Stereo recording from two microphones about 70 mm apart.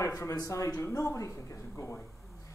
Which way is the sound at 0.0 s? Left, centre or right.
Left.